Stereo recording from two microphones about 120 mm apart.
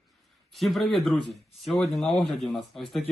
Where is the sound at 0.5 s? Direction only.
Centre (ahead or behind).